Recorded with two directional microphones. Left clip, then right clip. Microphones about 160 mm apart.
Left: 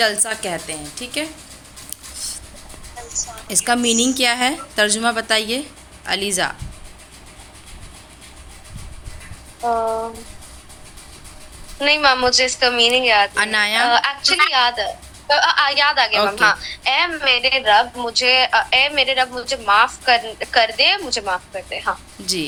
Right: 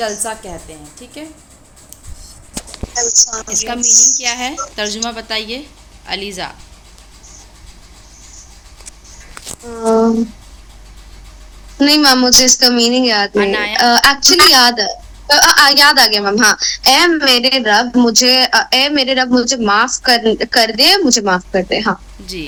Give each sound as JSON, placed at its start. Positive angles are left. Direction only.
{"t": 0.0, "sound": "a woman's voice", "side_deg": 0}
{"t": 3.5, "sound": "a woman's voice", "side_deg": 15}
{"t": 9.6, "sound": "speech", "side_deg": -30}
{"t": 11.8, "sound": "a woman's voice", "side_deg": -15}
{"t": 13.3, "sound": "a woman's voice", "side_deg": 5}
{"t": 13.8, "sound": "a woman's voice", "side_deg": -15}